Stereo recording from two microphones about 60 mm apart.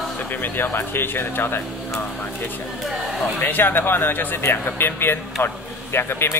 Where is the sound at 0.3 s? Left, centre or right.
Left.